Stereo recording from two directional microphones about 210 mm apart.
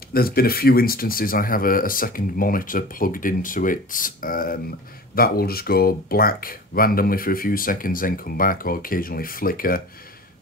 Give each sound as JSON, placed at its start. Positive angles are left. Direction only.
{"t": 0.1, "sound": "speech", "side_deg": 45}